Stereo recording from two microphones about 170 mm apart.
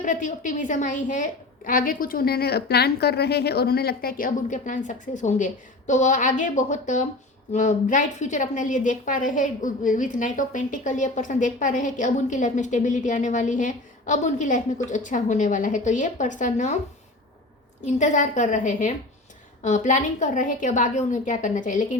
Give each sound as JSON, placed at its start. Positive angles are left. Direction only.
{"t": 0.0, "sound": "a woman's voice", "side_deg": 50}
{"t": 17.8, "sound": "a woman's voice", "side_deg": 45}